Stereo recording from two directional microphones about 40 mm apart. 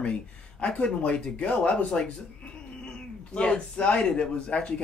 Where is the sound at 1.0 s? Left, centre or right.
Left.